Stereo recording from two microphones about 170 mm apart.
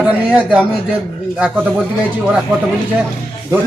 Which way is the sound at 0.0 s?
5° right (ahead or behind).